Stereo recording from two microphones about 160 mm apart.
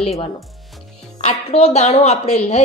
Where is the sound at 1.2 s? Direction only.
40° left (ahead or behind).